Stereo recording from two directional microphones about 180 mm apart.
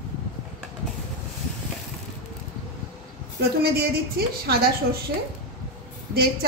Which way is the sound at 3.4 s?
60° right (ahead or behind).